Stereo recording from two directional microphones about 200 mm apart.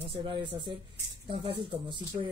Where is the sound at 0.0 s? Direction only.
25° right (ahead or behind).